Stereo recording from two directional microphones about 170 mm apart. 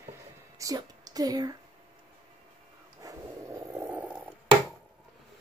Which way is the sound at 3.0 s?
20° right (ahead or behind).